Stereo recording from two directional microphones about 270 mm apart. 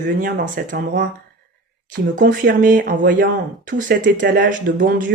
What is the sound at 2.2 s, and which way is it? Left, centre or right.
Speech, right.